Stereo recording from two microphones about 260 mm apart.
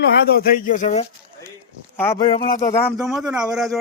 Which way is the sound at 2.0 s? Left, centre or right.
Centre.